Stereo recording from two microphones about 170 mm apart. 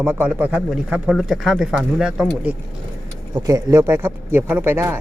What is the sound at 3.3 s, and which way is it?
Speech, 20° right (ahead or behind).